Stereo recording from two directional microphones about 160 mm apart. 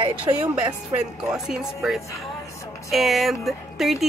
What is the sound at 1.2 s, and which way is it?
A woman's voice, 5° right (ahead or behind).